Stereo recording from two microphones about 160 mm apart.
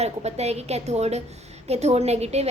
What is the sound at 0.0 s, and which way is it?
A woman's voice, 40° right (ahead or behind).